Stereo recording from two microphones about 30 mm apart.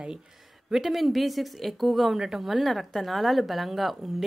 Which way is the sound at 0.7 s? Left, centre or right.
Centre.